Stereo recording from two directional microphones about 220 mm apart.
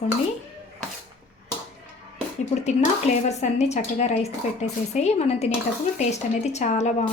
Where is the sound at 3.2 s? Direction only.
30° left (ahead or behind).